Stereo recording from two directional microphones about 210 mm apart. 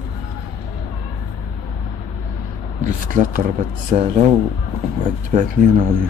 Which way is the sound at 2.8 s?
40° right (ahead or behind).